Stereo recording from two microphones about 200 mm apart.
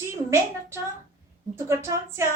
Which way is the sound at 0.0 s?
15° right (ahead or behind).